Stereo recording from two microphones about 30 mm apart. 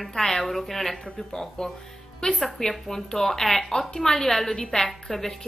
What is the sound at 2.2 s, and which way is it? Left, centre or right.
Speech, left.